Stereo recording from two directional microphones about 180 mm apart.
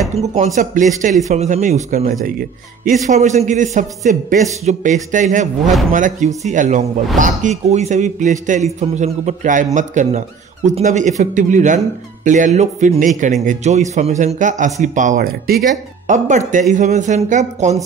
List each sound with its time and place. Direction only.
0.1 s a man's voice: 35° right (ahead or behind); by 15.6 s 55° right (ahead or behind)
16.1 s speech: 45° right (ahead or behind)